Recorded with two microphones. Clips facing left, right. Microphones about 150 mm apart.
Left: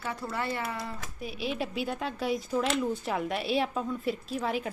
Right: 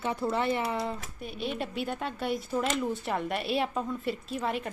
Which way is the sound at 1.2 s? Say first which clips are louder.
Left 2 dB; 5° left (ahead or behind).